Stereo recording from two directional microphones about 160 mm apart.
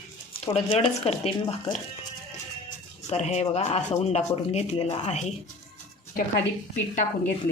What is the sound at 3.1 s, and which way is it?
Speech, 45° left (ahead or behind).